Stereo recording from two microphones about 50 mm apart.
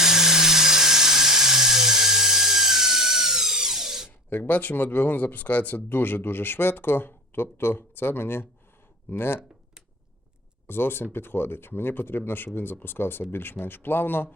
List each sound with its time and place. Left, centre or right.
0.0 s dental drill: centre
4.3 s speech: left
10.7 s speech: left